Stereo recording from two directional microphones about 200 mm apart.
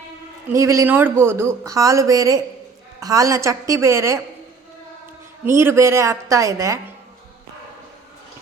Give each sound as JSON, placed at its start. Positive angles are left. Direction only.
{"t": 0.5, "sound": "speech", "side_deg": -15}
{"t": 5.5, "sound": "speech", "side_deg": -15}